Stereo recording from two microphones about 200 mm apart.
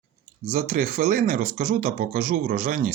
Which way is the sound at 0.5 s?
50° right (ahead or behind).